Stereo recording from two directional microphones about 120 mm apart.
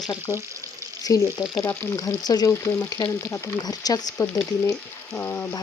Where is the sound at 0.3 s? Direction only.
25° right (ahead or behind).